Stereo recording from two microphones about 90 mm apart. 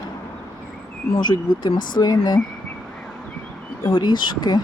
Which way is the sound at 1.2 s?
55° left (ahead or behind).